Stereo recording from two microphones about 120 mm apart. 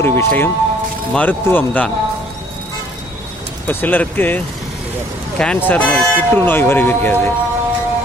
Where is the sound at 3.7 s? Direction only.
15° left (ahead or behind).